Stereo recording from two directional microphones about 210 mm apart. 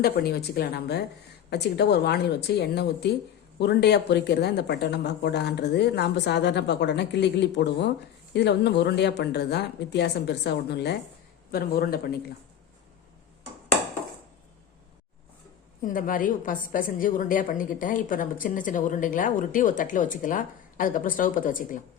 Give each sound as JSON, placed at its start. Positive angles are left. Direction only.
{"t": 0.0, "sound": "speech", "side_deg": 50}
{"t": 15.8, "sound": "a woman's voice", "side_deg": 40}